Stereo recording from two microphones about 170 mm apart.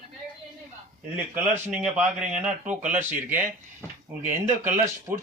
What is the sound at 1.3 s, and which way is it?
Speech, 10° right (ahead or behind).